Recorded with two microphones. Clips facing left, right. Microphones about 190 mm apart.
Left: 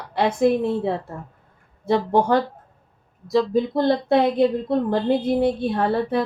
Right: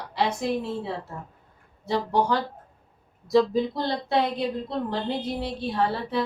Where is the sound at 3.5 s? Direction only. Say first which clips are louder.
Left 6 dB; 50° left (ahead or behind).